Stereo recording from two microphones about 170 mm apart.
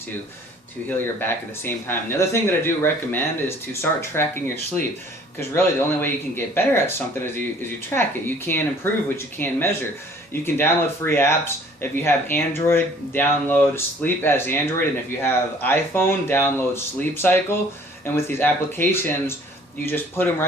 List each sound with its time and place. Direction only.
0.9 s speech: 10° left (ahead or behind)